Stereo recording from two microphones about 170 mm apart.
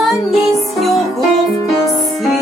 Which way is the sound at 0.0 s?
Centre (ahead or behind).